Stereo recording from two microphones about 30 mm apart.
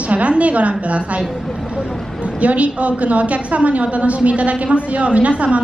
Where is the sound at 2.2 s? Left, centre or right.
Right.